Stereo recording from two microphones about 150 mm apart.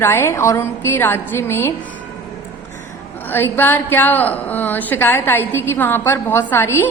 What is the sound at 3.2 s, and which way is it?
A woman's voice, 15° left (ahead or behind).